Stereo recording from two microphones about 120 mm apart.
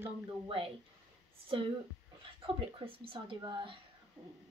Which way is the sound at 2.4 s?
50° right (ahead or behind).